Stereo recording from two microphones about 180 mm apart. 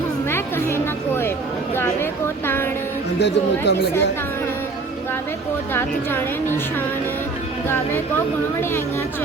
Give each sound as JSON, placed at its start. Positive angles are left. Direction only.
{"t": 0.3, "sound": "a sound", "side_deg": 15}
{"t": 3.2, "sound": "speech", "side_deg": 70}
{"t": 5.7, "sound": "a woman's voice", "side_deg": 10}